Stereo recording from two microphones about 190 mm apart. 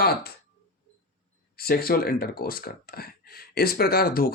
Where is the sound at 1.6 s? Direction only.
50° left (ahead or behind).